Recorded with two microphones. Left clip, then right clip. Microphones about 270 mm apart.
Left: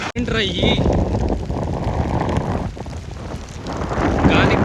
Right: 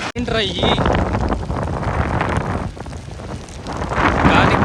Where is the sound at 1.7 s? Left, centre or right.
Left.